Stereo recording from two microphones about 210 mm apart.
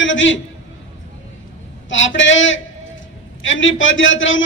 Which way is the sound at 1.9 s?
65° left (ahead or behind).